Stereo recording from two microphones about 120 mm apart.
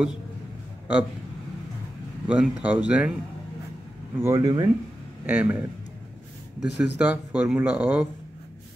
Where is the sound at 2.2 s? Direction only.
10° right (ahead or behind).